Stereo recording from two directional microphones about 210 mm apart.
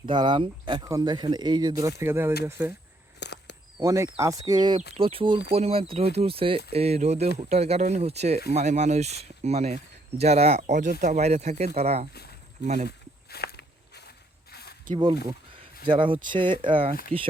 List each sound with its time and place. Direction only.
0.0 s speech: 20° right (ahead or behind)
3.2 s a sound: 55° left (ahead or behind)
3.8 s speech: 15° right (ahead or behind); by 12.9 s 35° right (ahead or behind)
13.3 s walk: 50° left (ahead or behind)
14.8 s speech: 25° right (ahead or behind)